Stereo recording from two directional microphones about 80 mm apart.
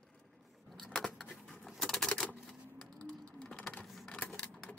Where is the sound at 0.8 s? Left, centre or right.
Centre.